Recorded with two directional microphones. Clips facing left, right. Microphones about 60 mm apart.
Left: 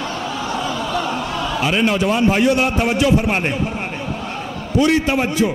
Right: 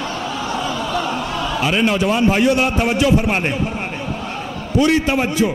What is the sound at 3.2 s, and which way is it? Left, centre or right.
Speech, right.